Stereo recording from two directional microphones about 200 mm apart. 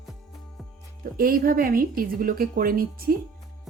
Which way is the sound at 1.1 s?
45° right (ahead or behind).